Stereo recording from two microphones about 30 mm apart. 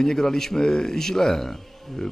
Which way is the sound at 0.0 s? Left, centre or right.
Centre.